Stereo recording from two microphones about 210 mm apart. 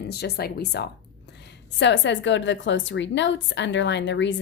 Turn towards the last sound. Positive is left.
turn(degrees=60)  # may be behind; listen again after turning